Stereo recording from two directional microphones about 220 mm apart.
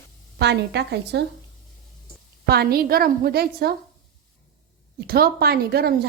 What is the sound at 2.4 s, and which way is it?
A woman's voice, 45° right (ahead or behind).